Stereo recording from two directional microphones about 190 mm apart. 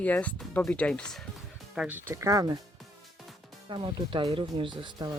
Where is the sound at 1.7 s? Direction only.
5° right (ahead or behind).